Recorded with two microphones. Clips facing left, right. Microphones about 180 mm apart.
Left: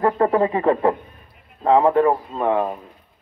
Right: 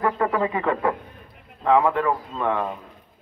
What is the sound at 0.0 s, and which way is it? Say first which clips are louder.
A man's voice: left 5 dB; 35° left (ahead or behind).